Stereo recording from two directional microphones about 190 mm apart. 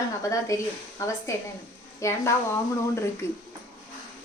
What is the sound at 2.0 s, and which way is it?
A woman's voice, 15° left (ahead or behind).